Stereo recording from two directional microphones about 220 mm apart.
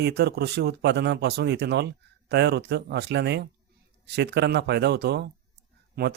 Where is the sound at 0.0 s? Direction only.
50° right (ahead or behind).